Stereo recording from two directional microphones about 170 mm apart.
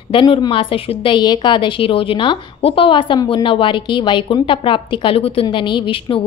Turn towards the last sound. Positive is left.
turn(degrees=30)  # may be behind; listen again after turning